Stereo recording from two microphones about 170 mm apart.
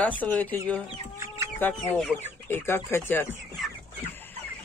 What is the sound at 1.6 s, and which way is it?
Speech, 10° left (ahead or behind).